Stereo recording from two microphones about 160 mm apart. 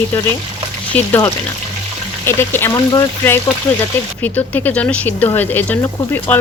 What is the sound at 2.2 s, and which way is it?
Speech, 15° left (ahead or behind).